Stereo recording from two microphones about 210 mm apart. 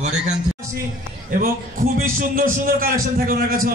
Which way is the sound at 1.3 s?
45° right (ahead or behind).